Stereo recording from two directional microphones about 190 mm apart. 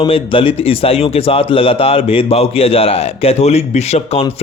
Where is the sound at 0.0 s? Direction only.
30° left (ahead or behind).